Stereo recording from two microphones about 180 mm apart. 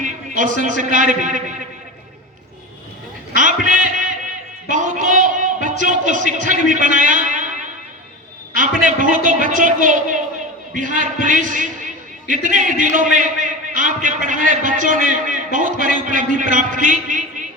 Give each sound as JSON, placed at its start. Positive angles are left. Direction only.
{"t": 0.0, "sound": "a man's voice", "side_deg": -45}
{"t": 3.7, "sound": "music", "side_deg": -45}
{"t": 4.7, "sound": "a man's voice", "side_deg": -45}